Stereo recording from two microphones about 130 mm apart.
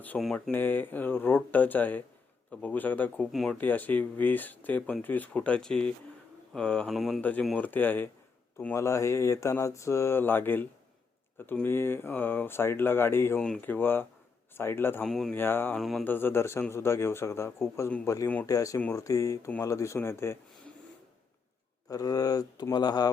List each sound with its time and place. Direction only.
0.3 s speech: 15° left (ahead or behind)
3.3 s speech: centre (ahead or behind)
3.6 s speech: 15° left (ahead or behind)
7.2 s speech: 10° left (ahead or behind)
15.0 s speech: 5° left (ahead or behind)
15.4 s speech: 15° left (ahead or behind)
15.8 s speech: centre (ahead or behind)
16.0 s speech: 15° left (ahead or behind)
21.8 s speech: 30° left (ahead or behind)